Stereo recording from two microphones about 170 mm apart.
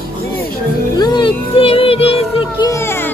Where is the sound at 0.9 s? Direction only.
25° left (ahead or behind).